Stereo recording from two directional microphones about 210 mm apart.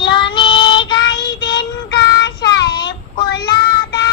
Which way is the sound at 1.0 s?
55° left (ahead or behind).